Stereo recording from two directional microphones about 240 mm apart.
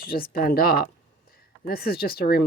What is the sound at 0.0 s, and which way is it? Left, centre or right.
Speech, left.